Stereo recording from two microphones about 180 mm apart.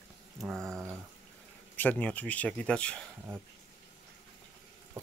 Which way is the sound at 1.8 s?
10° left (ahead or behind).